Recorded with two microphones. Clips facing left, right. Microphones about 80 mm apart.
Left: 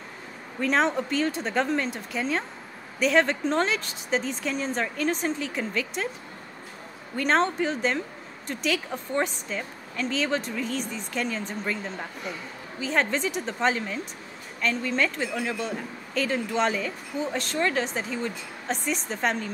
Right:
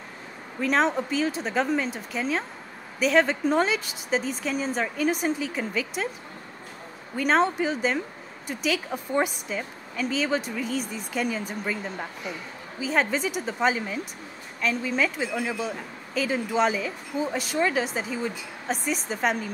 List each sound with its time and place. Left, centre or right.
0.6 s a woman's voice: centre
7.2 s a woman's voice: centre